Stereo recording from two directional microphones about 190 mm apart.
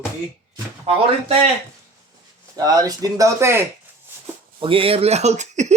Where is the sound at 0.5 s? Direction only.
30° right (ahead or behind).